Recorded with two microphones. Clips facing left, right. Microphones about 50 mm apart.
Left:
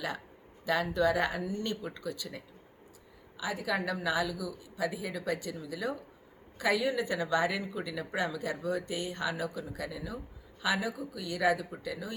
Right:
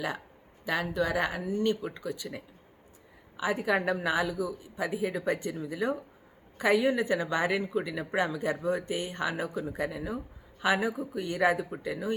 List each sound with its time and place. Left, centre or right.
0.6 s speech: centre
3.3 s speech: right